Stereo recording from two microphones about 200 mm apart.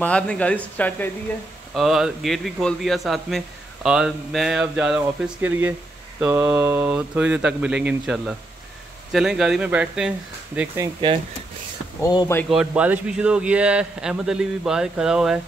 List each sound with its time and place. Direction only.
0.0 s a man's voice: 5° left (ahead or behind)
12.0 s speech: 20° left (ahead or behind)
12.4 s a man's voice: 5° right (ahead or behind)